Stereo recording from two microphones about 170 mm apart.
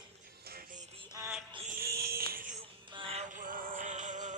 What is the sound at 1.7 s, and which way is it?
Music, 65° right (ahead or behind).